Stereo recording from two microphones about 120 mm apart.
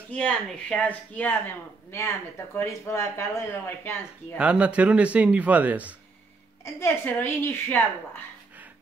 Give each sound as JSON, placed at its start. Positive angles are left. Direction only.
{"t": 0.1, "sound": "speech", "side_deg": 10}
{"t": 2.5, "sound": "speech", "side_deg": 25}
{"t": 4.4, "sound": "speech", "side_deg": -10}
{"t": 6.6, "sound": "speech", "side_deg": 20}